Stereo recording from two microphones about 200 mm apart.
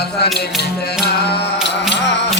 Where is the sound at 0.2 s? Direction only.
55° left (ahead or behind).